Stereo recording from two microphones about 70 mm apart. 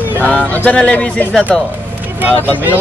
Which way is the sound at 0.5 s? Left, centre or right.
Left.